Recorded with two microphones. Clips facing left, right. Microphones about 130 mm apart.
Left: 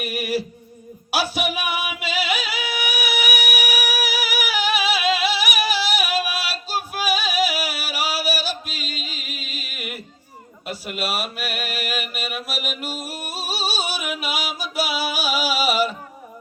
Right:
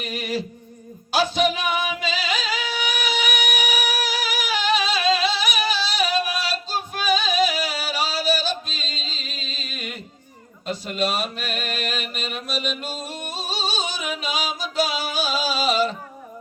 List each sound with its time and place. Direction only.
0.0 s music: 10° left (ahead or behind)
10.7 s mantra: 10° left (ahead or behind)
12.1 s singing: 10° left (ahead or behind)